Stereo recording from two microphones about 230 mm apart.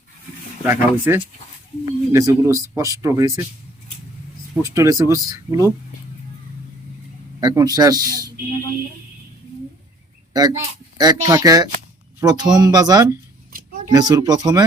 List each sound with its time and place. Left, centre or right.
0.7 s speech: centre
4.6 s speech: centre
7.4 s speech: centre
10.3 s speech: centre